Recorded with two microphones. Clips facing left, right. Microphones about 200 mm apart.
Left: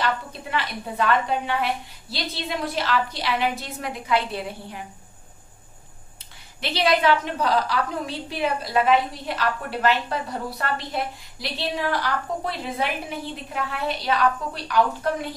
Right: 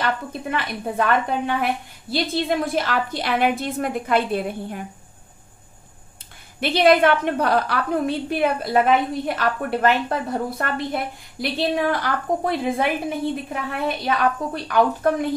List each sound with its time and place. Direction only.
0.0 s a woman's voice: 50° right (ahead or behind)
6.6 s a woman's voice: 55° right (ahead or behind)